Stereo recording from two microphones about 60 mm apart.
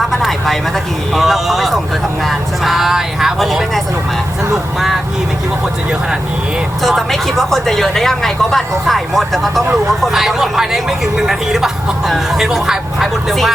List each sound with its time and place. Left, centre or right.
0.1 s vehicle: centre
1.1 s a sound: centre
2.2 s speech: centre
6.8 s speech: centre